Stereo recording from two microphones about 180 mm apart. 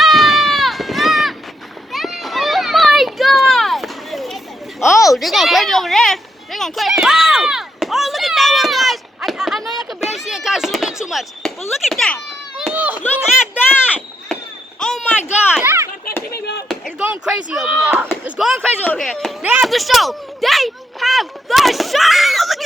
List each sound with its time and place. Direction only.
0.0 s run: centre (ahead or behind)
1.9 s children playing: centre (ahead or behind)
4.8 s a sound: centre (ahead or behind)
14.8 s basketball bounce: 5° left (ahead or behind)
15.6 s a sound: 15° right (ahead or behind)
16.3 s speech: 65° left (ahead or behind)
16.6 s speech: centre (ahead or behind)